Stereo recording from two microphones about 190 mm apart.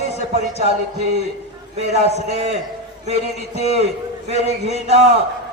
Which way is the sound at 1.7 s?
35° right (ahead or behind).